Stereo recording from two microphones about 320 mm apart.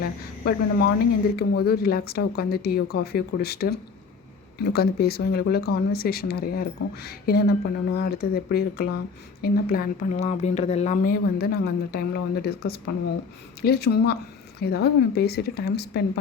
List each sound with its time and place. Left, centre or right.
0.0 s speech: left